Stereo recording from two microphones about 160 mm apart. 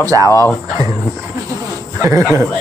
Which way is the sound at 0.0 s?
20° right (ahead or behind).